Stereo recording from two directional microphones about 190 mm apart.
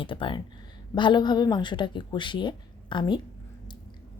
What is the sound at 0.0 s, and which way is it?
Speech, 25° left (ahead or behind).